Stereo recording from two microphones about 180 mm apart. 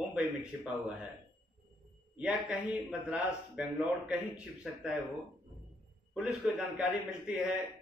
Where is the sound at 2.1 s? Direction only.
5° right (ahead or behind).